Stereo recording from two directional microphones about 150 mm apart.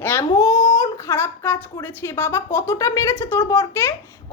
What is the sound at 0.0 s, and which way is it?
Speech, 15° left (ahead or behind).